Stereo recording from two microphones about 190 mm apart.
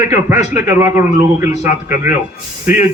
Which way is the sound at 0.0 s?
15° right (ahead or behind).